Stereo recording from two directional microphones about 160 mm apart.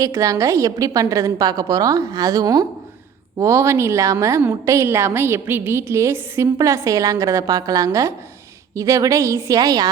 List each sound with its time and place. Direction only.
0.0 s a woman's voice: 20° right (ahead or behind)